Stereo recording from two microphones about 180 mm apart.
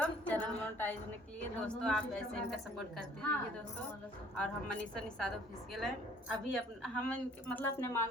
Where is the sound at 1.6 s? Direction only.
5° left (ahead or behind).